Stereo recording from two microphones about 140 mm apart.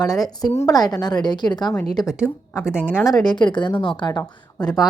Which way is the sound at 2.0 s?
5° right (ahead or behind).